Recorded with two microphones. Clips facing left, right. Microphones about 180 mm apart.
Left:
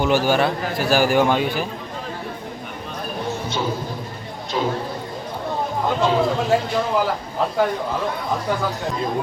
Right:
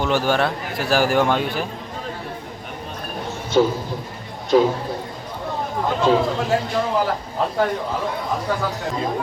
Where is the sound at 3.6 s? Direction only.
45° right (ahead or behind).